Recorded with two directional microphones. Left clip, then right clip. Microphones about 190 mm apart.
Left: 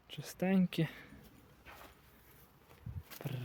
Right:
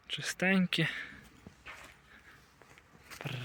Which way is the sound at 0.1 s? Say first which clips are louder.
Right 6 dB; 5° left (ahead or behind).